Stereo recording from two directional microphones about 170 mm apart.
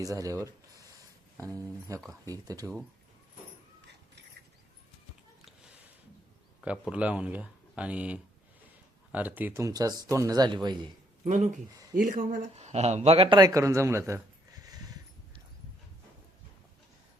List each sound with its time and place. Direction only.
0.0 s speech: 20° right (ahead or behind)
0.4 s a sound: 20° right (ahead or behind)
1.4 s speech: 20° right (ahead or behind)
6.6 s speech: 5° right (ahead or behind); by 10.8 s 25° right (ahead or behind)
11.9 s speech: 55° right (ahead or behind); by 14.2 s 15° right (ahead or behind)